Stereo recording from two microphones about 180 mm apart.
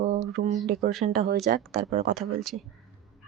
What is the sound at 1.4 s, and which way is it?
Speech, 45° right (ahead or behind).